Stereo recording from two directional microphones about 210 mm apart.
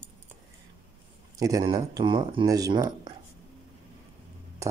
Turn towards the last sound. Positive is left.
turn(degrees=-20)  # may be behind; listen again after turning